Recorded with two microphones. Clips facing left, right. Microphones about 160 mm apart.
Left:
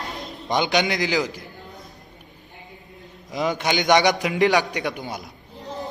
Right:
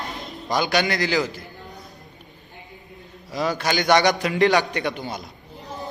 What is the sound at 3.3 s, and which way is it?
A man's voice, 20° left (ahead or behind).